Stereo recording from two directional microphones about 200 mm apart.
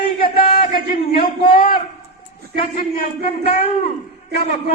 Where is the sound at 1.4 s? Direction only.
45° left (ahead or behind).